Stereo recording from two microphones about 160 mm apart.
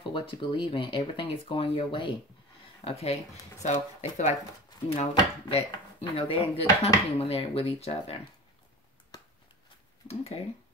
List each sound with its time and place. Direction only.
0.1 s speech: 30° left (ahead or behind); by 4.4 s 45° left (ahead or behind)
4.8 s speech: 35° left (ahead or behind)
10.0 s speech: 40° left (ahead or behind)